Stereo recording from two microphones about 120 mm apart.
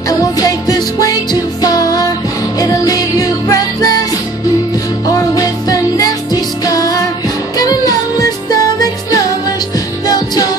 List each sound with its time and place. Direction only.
0.4 s music: 30° left (ahead or behind)
5.0 s music: 30° left (ahead or behind)